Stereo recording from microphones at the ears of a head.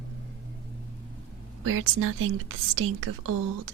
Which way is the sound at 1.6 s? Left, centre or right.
Right.